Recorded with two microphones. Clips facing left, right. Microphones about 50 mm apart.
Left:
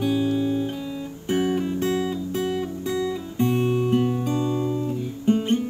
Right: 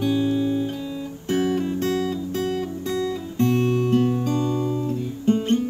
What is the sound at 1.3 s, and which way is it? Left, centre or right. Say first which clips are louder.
Guitar: right 1 dB; centre.